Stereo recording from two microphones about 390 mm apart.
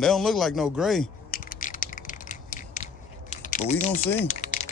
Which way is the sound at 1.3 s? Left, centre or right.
Left.